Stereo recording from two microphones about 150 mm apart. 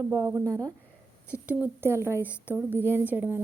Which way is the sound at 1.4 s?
10° right (ahead or behind).